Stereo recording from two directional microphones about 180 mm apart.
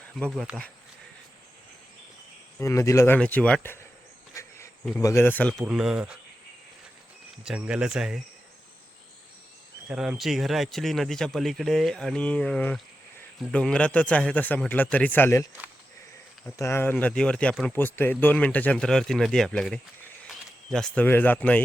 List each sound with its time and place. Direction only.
0.3 s speech: centre (ahead or behind)
2.6 s speech: 15° left (ahead or behind)
4.4 s cricket: 15° left (ahead or behind)
4.9 s speech: 15° left (ahead or behind); by 6.1 s 5° right (ahead or behind)
7.4 s speech: 5° right (ahead or behind)
9.9 s speech: 5° right (ahead or behind); by 15.4 s 15° left (ahead or behind)
16.6 s speech: 15° left (ahead or behind)